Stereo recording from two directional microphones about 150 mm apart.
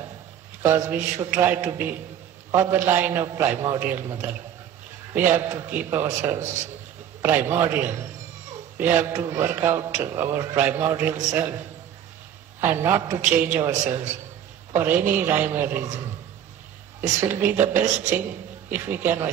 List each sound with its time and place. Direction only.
0.6 s a man's voice: 15° right (ahead or behind)
12.5 s a man's voice: 15° right (ahead or behind)
17.2 s a man's voice: 15° right (ahead or behind)